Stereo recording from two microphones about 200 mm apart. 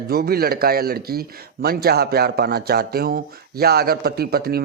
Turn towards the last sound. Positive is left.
turn(degrees=-50)  # may be behind; listen again after turning